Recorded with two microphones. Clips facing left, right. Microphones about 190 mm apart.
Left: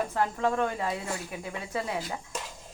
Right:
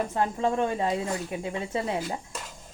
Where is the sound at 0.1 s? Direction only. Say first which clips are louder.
Right 1 dB; 20° right (ahead or behind).